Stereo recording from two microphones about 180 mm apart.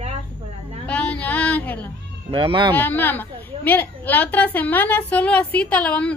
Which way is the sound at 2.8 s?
10° left (ahead or behind).